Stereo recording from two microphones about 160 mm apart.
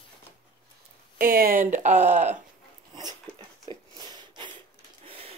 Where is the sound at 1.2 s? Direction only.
65° right (ahead or behind).